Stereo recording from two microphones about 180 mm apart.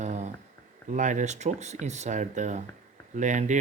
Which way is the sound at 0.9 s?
45° right (ahead or behind).